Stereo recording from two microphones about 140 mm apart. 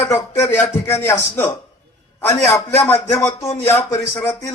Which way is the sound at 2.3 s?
20° left (ahead or behind).